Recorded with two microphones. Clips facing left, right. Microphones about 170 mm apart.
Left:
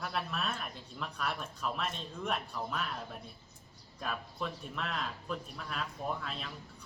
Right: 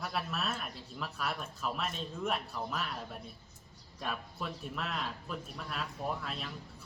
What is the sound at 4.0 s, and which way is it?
Speech, centre (ahead or behind).